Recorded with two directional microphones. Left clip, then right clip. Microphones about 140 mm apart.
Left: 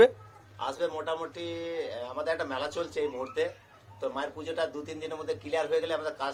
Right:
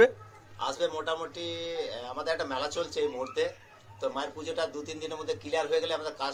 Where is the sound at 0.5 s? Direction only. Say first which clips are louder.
Right 1 dB; centre (ahead or behind).